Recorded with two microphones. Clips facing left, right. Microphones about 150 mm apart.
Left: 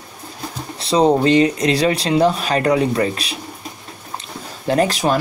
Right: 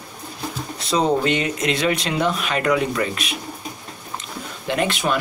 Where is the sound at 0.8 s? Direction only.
30° left (ahead or behind).